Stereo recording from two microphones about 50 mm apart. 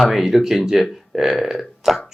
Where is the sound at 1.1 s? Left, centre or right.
Centre.